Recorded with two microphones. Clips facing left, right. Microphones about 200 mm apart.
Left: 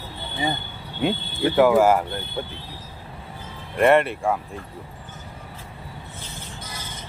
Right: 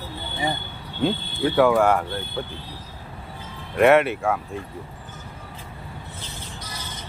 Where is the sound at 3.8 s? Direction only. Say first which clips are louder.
Right 1 dB; centre (ahead or behind).